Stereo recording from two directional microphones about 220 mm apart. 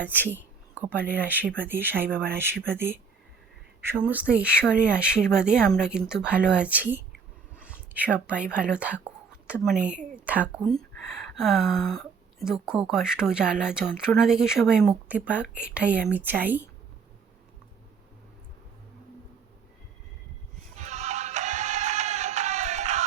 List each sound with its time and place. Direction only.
0.3 s a sound: 5° right (ahead or behind)
0.9 s speech: 10° right (ahead or behind)
20.7 s music: 30° right (ahead or behind)